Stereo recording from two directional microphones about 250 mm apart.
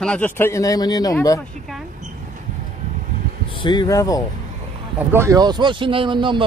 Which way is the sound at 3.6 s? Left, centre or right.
Centre.